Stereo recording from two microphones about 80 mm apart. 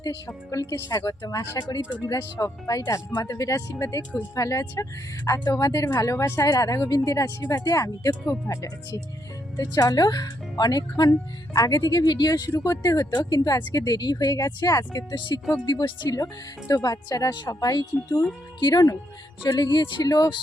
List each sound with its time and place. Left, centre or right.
0.5 s speech: left
9.6 s speech: left
13.7 s speech: left
15.1 s speech: left
15.5 s speech: left
16.0 s speech: left